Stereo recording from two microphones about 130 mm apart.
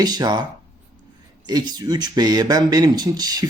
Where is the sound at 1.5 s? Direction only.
30° right (ahead or behind).